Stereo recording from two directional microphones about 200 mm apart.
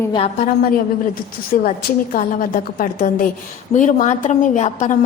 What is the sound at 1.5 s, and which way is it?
A woman's voice, 45° left (ahead or behind).